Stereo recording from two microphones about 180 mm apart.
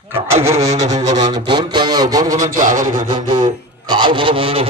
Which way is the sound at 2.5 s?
45° right (ahead or behind).